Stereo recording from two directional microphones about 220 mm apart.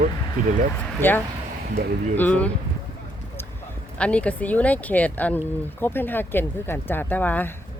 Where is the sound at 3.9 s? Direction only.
5° left (ahead or behind).